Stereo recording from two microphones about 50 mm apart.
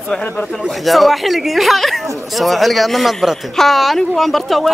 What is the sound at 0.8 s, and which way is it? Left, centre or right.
Speech, centre.